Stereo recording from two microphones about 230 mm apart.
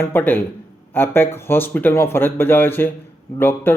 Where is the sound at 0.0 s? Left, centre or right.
Centre.